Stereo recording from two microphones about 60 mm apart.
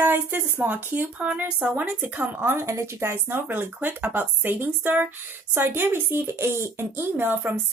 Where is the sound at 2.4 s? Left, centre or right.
Right.